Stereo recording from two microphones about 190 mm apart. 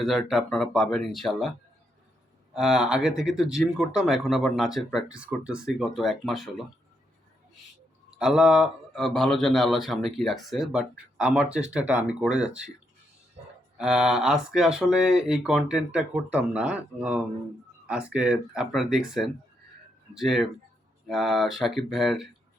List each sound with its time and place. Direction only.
0.0 s speech: centre (ahead or behind)
2.6 s speech: centre (ahead or behind)
8.2 s speech: 5° right (ahead or behind)
13.4 s a sound: 30° right (ahead or behind)
13.7 s speech: 5° right (ahead or behind)